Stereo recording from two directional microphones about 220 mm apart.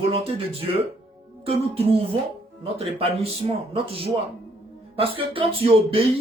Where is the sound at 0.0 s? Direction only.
25° right (ahead or behind).